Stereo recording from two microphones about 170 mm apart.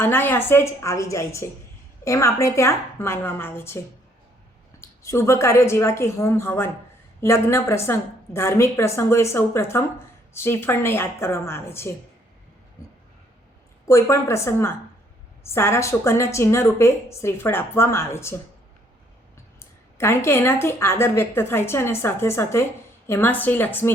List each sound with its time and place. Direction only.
0.0 s speech: 10° left (ahead or behind)
4.8 s speech: 15° left (ahead or behind)
13.8 s speech: 15° left (ahead or behind)
19.5 s speech: 15° left (ahead or behind)